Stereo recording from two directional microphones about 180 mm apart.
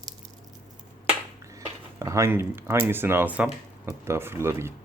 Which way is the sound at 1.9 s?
15° right (ahead or behind).